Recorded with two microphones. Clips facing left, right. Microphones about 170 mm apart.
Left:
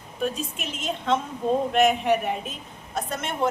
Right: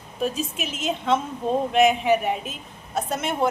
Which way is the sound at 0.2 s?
5° right (ahead or behind).